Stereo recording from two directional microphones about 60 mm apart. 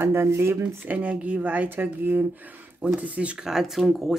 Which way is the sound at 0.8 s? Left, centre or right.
Right.